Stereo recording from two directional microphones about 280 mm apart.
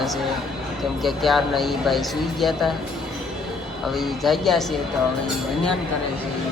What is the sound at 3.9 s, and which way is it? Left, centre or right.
Speech, centre.